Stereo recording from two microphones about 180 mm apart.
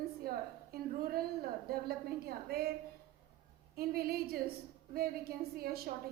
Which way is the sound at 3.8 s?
60° right (ahead or behind).